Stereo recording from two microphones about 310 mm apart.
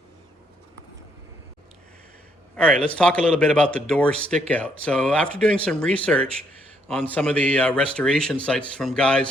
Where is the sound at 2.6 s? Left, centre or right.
Centre.